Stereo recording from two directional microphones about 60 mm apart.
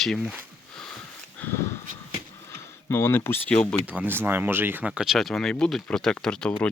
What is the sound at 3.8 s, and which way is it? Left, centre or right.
Speech, right.